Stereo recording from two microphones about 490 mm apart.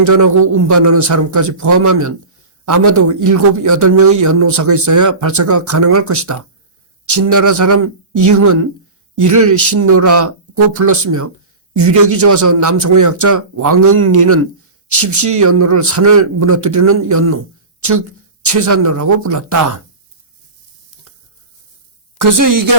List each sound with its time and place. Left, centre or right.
0.0 s a man's voice: right
18.4 s a man's voice: right
22.2 s a man's voice: right